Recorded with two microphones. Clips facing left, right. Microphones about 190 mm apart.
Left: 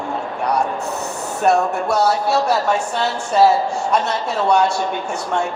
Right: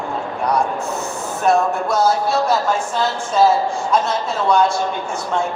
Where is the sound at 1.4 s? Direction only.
70° left (ahead or behind).